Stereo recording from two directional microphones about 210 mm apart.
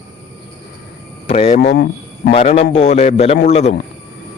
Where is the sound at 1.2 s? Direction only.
30° left (ahead or behind).